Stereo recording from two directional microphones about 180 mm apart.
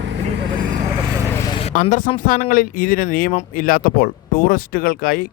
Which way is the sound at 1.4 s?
20° left (ahead or behind).